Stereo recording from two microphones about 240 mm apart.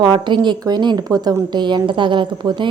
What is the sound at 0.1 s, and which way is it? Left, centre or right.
A woman's voice, centre.